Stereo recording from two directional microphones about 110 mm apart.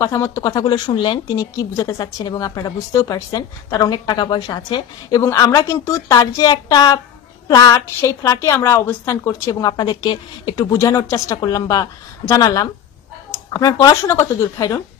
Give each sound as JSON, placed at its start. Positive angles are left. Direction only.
{"t": 0.0, "sound": "speech", "side_deg": 30}
{"t": 5.2, "sound": "a woman's voice", "side_deg": 25}